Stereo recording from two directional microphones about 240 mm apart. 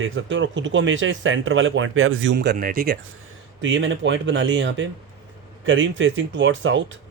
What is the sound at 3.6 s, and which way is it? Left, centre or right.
Speech, right.